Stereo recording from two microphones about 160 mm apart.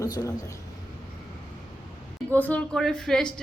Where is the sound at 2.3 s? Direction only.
10° left (ahead or behind).